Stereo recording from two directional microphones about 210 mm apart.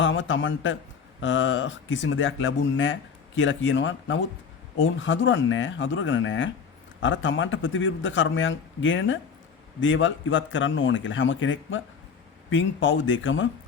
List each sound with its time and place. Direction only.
0.0 s speech: 65° left (ahead or behind)